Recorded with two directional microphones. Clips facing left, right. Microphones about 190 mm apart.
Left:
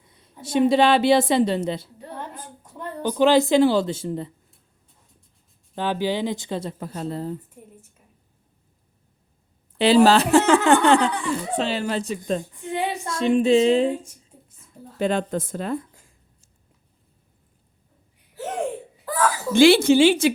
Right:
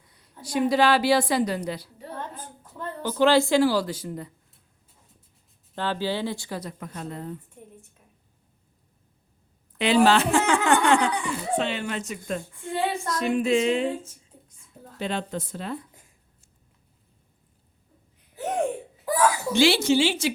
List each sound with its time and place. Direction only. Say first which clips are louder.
0.1 s a woman's voice: left 5 dB; 20° left (ahead or behind)
2.1 s a woman's voice: left 1 dB; 15° left (ahead or behind)
5.7 s a woman's voice: left 3 dB; 15° left (ahead or behind); by 7.3 s 30° left (ahead or behind)
7.6 s a sound: left 1 dB; 5° left (ahead or behind)
9.7 s speech: left 4 dB; 35° left (ahead or behind)
12.2 s a woman's voice: left 5 dB; 20° left (ahead or behind)
13.9 s a sound: left 3 dB; 15° left (ahead or behind)
14.9 s speech: left 7 dB; 50° left (ahead or behind)
18.3 s a sound: right 2 dB; 15° right (ahead or behind)
19.5 s speech: left 8 dB; 55° left (ahead or behind)